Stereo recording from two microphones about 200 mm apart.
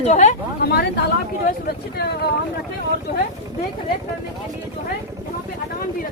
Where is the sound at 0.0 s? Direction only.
35° left (ahead or behind).